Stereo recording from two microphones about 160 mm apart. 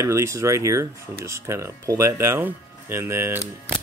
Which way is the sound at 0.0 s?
15° right (ahead or behind).